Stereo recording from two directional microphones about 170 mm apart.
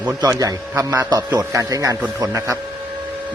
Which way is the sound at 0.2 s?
20° right (ahead or behind).